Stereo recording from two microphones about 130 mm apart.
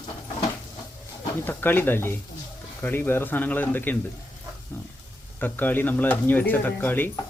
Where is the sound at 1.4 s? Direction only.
15° left (ahead or behind).